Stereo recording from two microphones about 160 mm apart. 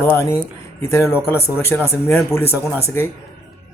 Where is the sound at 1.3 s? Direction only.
15° left (ahead or behind).